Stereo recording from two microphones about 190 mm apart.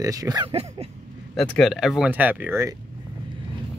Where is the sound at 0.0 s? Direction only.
20° right (ahead or behind).